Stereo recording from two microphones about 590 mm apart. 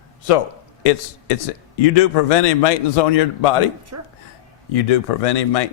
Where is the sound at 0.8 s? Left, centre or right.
Left.